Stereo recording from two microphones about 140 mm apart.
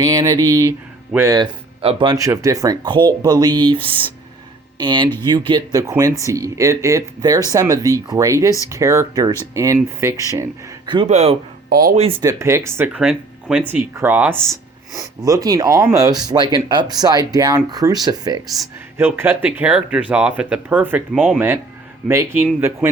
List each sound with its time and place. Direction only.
0.0 s speech: 25° right (ahead or behind)
1.4 s speech: 40° right (ahead or behind); by 10.5 s 20° right (ahead or behind)
10.8 s speech: 35° right (ahead or behind)
11.1 s speech: 50° right (ahead or behind)
11.7 s speech: 90° right
12.2 s speech: 20° right (ahead or behind)
18.9 s speech: 15° right (ahead or behind)